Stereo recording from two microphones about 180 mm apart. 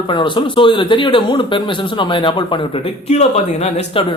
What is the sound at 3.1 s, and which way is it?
Speech, 35° left (ahead or behind).